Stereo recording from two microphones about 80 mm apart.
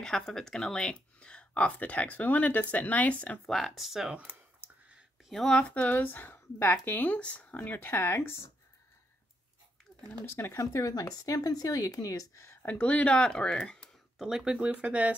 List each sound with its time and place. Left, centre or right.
0.0 s speech: centre
3.4 s speech: centre
4.1 s speech: centre
4.6 s a sound: centre
5.3 s speech: centre
5.6 s speech: centre
10.2 s speech: left
12.6 s speech: centre
14.1 s speech: centre